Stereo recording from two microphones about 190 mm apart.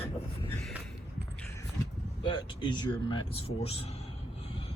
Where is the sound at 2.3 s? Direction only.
25° left (ahead or behind).